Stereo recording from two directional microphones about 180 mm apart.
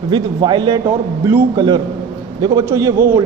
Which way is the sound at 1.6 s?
25° right (ahead or behind).